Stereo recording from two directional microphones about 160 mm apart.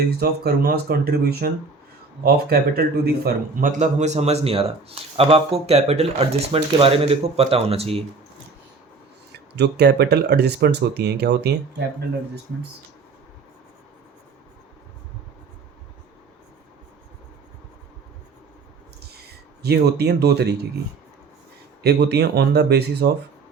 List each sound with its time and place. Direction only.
0.2 s speech: 75° right (ahead or behind); by 8.0 s 40° right (ahead or behind)
9.6 s speech: 90° right
19.6 s speech: 90° right
21.8 s speech: 90° right